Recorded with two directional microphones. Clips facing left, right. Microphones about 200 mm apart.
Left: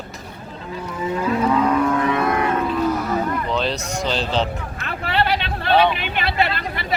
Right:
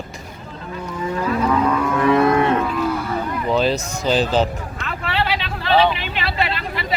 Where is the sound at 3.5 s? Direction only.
5° right (ahead or behind).